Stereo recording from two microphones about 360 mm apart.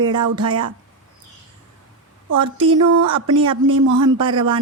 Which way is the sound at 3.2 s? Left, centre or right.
Centre.